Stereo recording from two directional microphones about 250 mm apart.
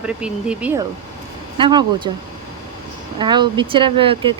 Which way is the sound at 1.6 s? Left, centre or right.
Centre.